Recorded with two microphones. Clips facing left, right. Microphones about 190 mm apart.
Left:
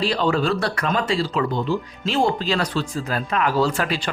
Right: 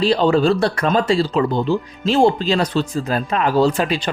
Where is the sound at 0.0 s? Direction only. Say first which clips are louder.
Right 6 dB; 30° right (ahead or behind).